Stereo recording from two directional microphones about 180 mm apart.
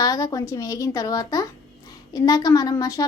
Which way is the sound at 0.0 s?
20° left (ahead or behind).